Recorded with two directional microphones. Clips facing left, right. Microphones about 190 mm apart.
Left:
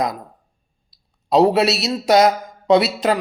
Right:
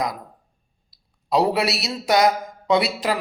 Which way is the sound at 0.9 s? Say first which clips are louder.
Left 3 dB; 25° left (ahead or behind).